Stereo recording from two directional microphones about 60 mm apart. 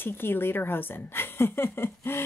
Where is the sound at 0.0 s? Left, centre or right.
Left.